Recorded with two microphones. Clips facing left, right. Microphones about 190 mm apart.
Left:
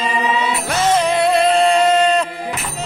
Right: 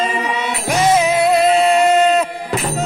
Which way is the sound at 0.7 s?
10° right (ahead or behind).